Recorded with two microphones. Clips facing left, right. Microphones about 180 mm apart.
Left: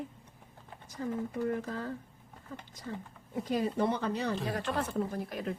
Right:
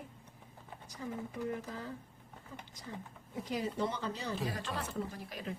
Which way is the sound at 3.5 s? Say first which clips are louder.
Left 6 dB; 55° left (ahead or behind).